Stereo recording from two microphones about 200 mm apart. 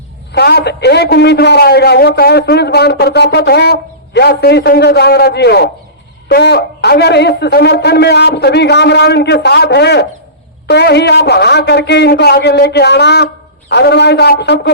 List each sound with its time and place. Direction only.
0.3 s a man's voice: 55° left (ahead or behind)